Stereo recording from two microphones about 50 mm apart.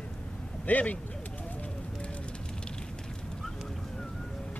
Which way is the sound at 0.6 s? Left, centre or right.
Left.